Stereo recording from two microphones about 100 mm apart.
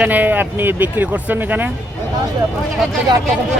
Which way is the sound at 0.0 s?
15° right (ahead or behind).